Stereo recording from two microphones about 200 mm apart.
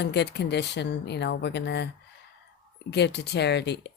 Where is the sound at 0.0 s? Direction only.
60° left (ahead or behind).